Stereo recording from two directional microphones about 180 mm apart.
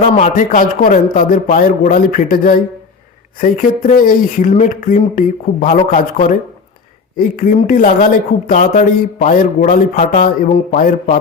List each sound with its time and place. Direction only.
0.0 s speech: 45° left (ahead or behind)
7.2 s speech: 50° left (ahead or behind)